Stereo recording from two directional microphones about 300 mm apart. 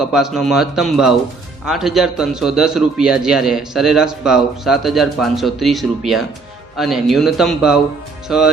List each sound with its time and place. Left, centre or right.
0.0 s a man's voice: centre